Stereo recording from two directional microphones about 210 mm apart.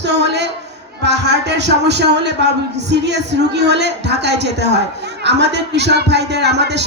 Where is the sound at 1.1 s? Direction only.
55° right (ahead or behind).